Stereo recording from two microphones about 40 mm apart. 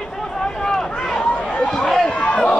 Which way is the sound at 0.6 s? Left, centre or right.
Centre.